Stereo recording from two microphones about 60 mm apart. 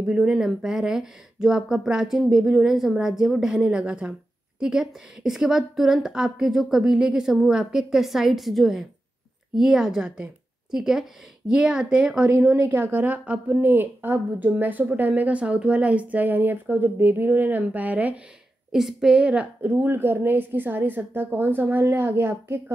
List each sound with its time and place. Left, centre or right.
0.0 s a woman's voice: centre
18.7 s speech: centre
19.3 s a woman's voice: right